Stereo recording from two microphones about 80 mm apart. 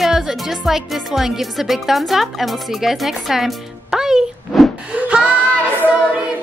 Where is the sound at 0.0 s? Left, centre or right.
Centre.